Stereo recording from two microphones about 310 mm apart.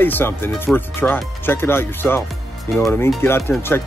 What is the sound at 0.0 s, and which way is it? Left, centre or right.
Speech, centre.